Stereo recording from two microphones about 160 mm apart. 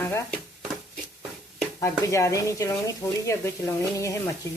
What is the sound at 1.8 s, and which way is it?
Speech, 20° left (ahead or behind).